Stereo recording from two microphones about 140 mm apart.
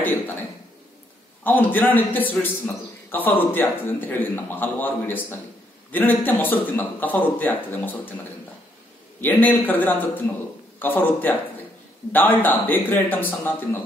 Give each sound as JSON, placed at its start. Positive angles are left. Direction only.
{"t": 0.0, "sound": "a sound", "side_deg": 15}
{"t": 1.4, "sound": "a man's voice", "side_deg": 15}
{"t": 9.2, "sound": "a man's voice", "side_deg": 15}